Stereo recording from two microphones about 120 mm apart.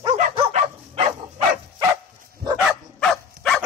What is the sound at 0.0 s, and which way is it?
Dog, 65° right (ahead or behind).